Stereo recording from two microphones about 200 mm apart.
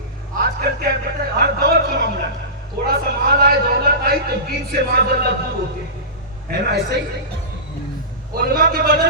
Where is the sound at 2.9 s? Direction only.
50° right (ahead or behind).